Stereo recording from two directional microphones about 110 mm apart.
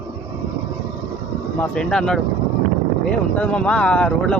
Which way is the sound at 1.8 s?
5° left (ahead or behind).